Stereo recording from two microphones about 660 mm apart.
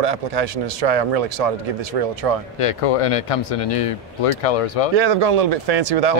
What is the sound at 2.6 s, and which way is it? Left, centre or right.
Speech, left.